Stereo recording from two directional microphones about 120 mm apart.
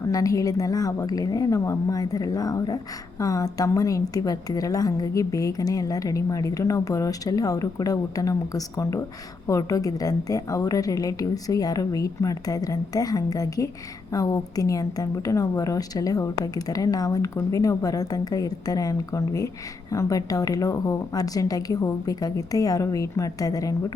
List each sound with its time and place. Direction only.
0.0 s a woman's voice: 30° left (ahead or behind)